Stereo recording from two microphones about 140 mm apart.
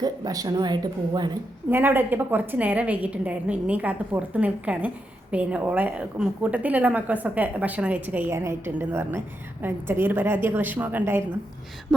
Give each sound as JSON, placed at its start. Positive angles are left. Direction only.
{"t": 0.0, "sound": "speech", "side_deg": -25}
{"t": 1.7, "sound": "a woman's voice", "side_deg": -15}
{"t": 11.9, "sound": "a sound", "side_deg": 5}